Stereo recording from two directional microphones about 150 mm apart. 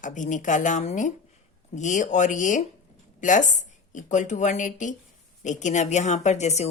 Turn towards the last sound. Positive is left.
turn(degrees=50)  # may be behind; listen again after turning